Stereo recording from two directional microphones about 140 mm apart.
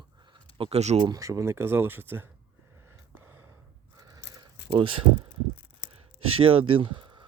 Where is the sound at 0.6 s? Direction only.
50° right (ahead or behind).